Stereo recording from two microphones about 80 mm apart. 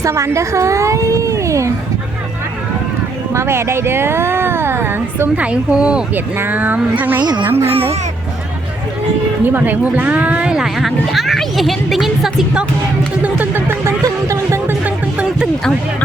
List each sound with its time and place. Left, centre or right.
0.0 s a woman's voice: right
3.3 s speech: right
5.4 s speech: centre
6.1 s speech: right
7.2 s speech: right
7.4 s speech: right
9.4 s speech: right; by 12.6 s centre
13.2 s speech: right
14.0 s a sound: right
14.7 s music: centre